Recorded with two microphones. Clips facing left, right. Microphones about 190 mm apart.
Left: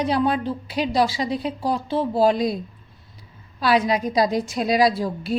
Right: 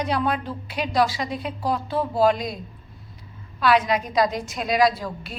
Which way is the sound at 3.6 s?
35° left (ahead or behind).